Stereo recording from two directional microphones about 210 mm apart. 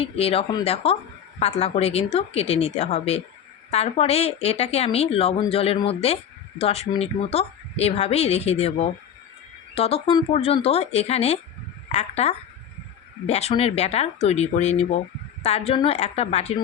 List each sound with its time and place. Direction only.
0.0 s speech: 30° left (ahead or behind)